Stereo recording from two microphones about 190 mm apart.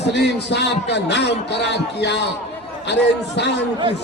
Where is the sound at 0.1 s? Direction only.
65° left (ahead or behind).